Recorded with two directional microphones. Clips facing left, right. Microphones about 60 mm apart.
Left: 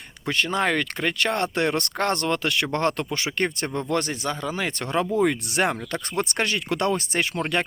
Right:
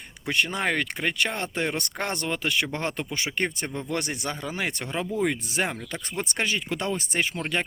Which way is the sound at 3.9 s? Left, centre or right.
Centre.